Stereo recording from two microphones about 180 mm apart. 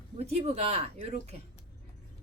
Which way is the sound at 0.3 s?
35° right (ahead or behind).